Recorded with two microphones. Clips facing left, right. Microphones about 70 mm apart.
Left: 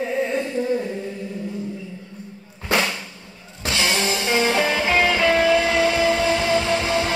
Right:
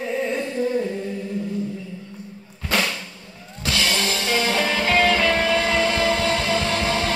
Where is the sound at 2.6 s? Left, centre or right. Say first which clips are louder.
Left 2 dB; centre.